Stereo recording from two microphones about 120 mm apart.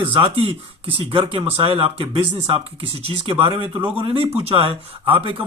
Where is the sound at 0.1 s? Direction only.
45° right (ahead or behind).